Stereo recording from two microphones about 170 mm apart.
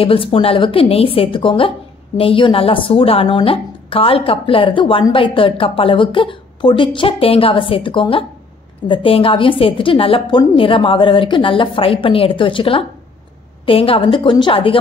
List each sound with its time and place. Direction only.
0.0 s a woman's voice: 30° left (ahead or behind)